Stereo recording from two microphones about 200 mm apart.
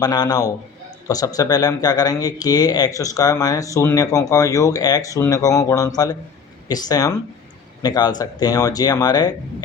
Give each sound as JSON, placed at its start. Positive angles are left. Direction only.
{"t": 0.0, "sound": "speech", "side_deg": 20}